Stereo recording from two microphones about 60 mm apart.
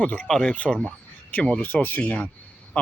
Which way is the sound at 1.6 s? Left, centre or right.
Left.